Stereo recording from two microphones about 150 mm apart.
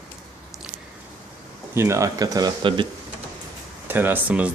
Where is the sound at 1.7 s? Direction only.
20° right (ahead or behind).